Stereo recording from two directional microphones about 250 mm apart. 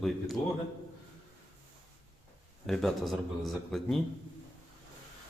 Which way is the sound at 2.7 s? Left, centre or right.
Centre.